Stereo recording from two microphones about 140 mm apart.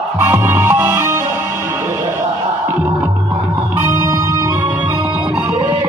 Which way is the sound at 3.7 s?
20° right (ahead or behind).